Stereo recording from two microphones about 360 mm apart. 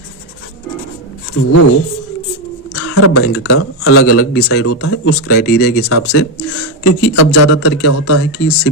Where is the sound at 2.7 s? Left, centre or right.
Left.